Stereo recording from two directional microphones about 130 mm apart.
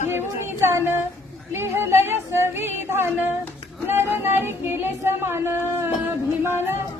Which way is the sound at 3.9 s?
15° right (ahead or behind).